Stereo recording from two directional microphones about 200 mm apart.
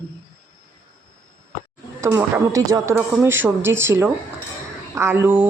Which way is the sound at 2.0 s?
15° right (ahead or behind).